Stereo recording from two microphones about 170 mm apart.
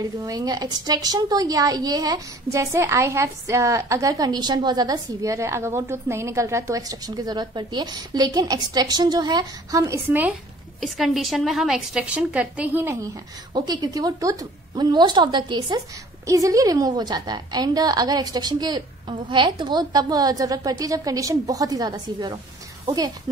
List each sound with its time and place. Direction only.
0.2 s a woman's voice: 20° right (ahead or behind)
10.8 s a woman's voice: centre (ahead or behind)
13.5 s a woman's voice: 25° right (ahead or behind)